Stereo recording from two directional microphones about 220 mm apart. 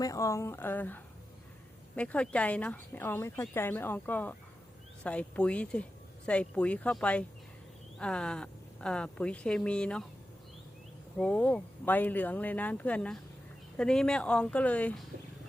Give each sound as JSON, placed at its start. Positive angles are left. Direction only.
{"t": 0.0, "sound": "speech", "side_deg": 15}
{"t": 11.2, "sound": "speech", "side_deg": 5}